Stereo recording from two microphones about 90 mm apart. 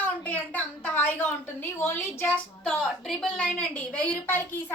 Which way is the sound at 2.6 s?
5° left (ahead or behind).